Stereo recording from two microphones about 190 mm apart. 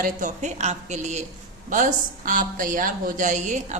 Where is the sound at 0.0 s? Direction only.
45° right (ahead or behind).